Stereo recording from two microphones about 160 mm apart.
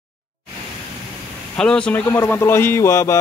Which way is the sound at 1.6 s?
5° left (ahead or behind).